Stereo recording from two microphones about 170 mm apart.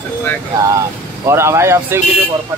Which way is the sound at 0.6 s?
20° right (ahead or behind).